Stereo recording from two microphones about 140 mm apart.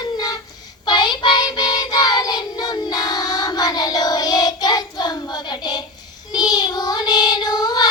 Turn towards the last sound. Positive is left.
turn(degrees=30)  # may be behind; listen again after turning